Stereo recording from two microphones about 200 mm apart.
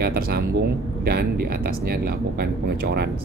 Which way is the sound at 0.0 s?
50° right (ahead or behind).